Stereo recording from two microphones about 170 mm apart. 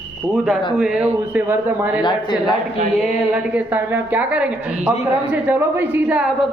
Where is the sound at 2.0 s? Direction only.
25° left (ahead or behind).